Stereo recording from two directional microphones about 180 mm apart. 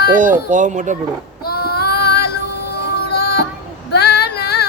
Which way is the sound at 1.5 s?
60° left (ahead or behind).